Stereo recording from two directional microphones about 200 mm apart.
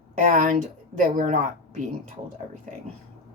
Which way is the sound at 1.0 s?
40° right (ahead or behind).